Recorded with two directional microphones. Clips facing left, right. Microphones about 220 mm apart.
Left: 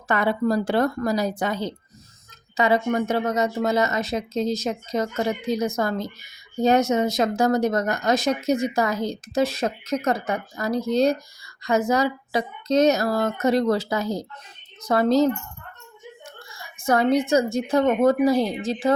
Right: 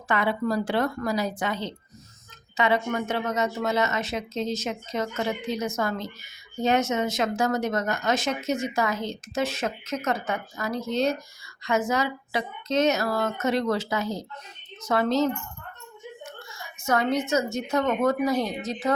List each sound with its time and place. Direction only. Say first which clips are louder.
0.1 s speech: left 4 dB; 40° left (ahead or behind)